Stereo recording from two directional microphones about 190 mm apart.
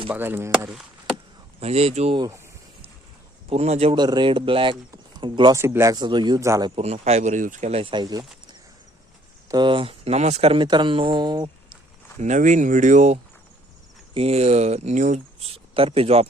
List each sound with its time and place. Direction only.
0.1 s speech: 10° right (ahead or behind)
1.6 s speech: 35° right (ahead or behind)
3.5 s speech: 35° right (ahead or behind)
6.8 s speech: 35° right (ahead or behind)
9.5 s speech: 25° right (ahead or behind)
12.2 s speech: 40° right (ahead or behind)